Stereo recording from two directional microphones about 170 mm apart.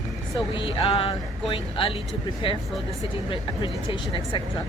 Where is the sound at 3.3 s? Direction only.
30° left (ahead or behind).